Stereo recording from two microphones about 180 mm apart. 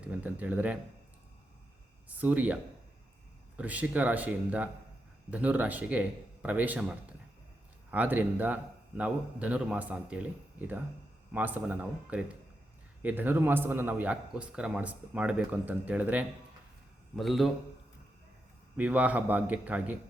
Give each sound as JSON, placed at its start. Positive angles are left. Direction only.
{"t": 0.0, "sound": "a man's voice", "side_deg": -10}
{"t": 2.0, "sound": "speech", "side_deg": -10}
{"t": 3.6, "sound": "a man's voice", "side_deg": -10}
{"t": 18.8, "sound": "a man's voice", "side_deg": -10}